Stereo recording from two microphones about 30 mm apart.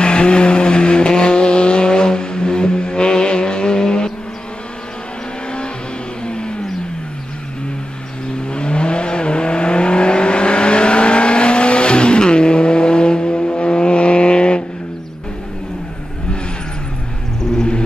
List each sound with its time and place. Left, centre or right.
0.0 s vehicle: left
6.2 s vehicle: left
8.5 s vehicle: left
17.4 s vehicle: centre